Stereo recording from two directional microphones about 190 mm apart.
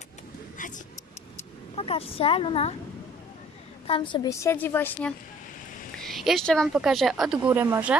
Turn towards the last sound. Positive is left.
turn(degrees=-10)  # may be behind; listen again after turning